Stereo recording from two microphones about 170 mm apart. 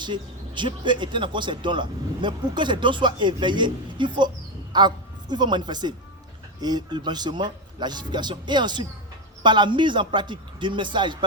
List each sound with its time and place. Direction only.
0.0 s a woman's voice: 25° right (ahead or behind)